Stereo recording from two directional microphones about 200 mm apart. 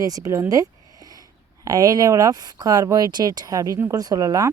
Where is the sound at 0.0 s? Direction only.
15° right (ahead or behind).